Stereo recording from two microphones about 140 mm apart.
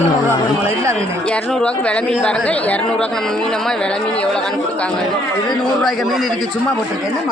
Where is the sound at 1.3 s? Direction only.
5° left (ahead or behind).